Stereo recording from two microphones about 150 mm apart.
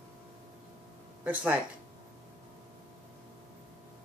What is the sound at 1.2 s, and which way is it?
Speech, 10° right (ahead or behind).